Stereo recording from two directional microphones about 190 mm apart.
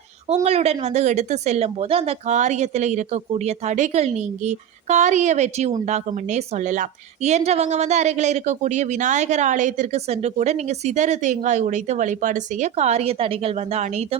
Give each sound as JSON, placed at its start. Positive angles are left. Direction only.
{"t": 0.4, "sound": "a woman's voice", "side_deg": -35}